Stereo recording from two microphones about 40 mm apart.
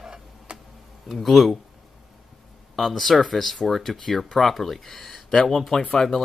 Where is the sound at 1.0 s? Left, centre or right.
Centre.